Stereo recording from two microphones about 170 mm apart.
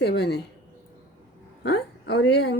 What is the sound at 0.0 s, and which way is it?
Speech, 75° left (ahead or behind).